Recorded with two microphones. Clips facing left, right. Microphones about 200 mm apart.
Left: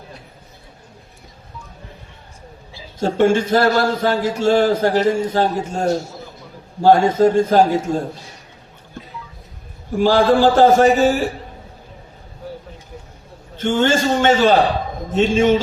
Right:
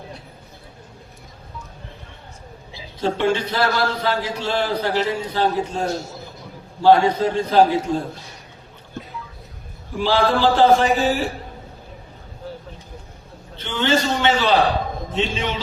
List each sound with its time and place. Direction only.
3.0 s a man's voice: 45° left (ahead or behind)
6.8 s a man's voice: 45° left (ahead or behind)
9.9 s a man's voice: 45° left (ahead or behind)
13.6 s a man's voice: 45° left (ahead or behind)